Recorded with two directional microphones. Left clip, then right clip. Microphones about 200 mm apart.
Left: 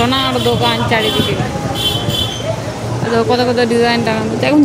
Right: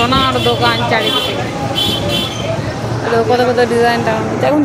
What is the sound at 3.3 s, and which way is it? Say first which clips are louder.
Speech: right 2 dB; 75° left (ahead or behind).